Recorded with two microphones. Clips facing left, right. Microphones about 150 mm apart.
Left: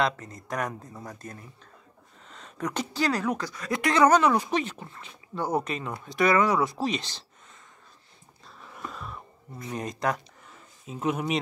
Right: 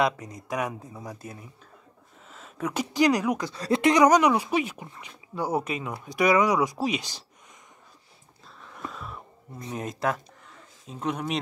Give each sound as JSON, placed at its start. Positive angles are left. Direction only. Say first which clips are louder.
{"t": 0.0, "sound": "speech", "louder": "right 2 dB", "side_deg": -10}
{"t": 3.5, "sound": "speech", "louder": "right 6 dB", "side_deg": -30}
{"t": 3.9, "sound": "speech", "louder": "even", "side_deg": -15}
{"t": 8.5, "sound": "a sound", "louder": "right 1 dB", "side_deg": 5}
{"t": 9.7, "sound": "speech", "louder": "even", "side_deg": -5}